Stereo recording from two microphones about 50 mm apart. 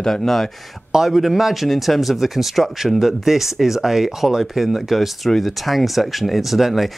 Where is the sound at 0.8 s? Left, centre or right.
Centre.